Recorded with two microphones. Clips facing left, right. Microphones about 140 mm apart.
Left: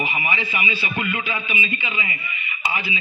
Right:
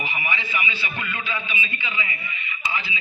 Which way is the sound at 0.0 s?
20° left (ahead or behind).